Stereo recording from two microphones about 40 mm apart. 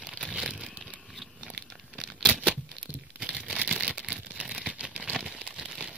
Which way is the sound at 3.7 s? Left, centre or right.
Right.